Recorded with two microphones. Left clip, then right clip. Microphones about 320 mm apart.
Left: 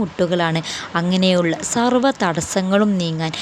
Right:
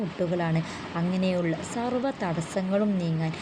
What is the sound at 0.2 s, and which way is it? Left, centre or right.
A woman's voice, left.